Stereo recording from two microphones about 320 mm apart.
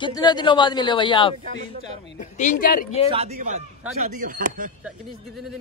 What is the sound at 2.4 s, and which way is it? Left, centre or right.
Speech, left.